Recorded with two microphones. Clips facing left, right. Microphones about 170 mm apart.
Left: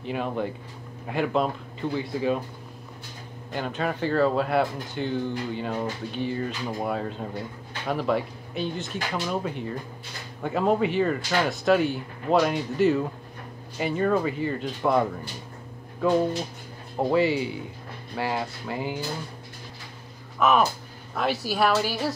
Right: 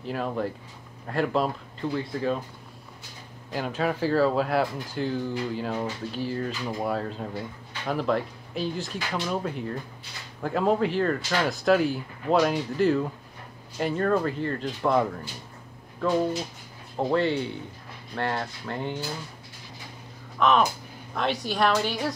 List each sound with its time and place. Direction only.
0.0 s speech: centre (ahead or behind)
3.5 s speech: centre (ahead or behind)
17.1 s speech: 5° left (ahead or behind)
20.3 s speech: 5° left (ahead or behind)